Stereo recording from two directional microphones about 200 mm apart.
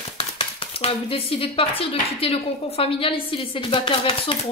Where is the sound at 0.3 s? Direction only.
30° left (ahead or behind).